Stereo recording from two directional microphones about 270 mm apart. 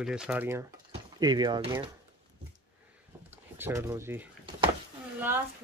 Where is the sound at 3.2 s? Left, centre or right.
Centre.